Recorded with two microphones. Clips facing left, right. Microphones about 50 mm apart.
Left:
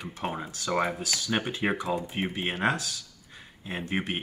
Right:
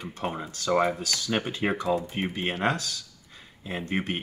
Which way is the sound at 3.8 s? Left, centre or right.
Centre.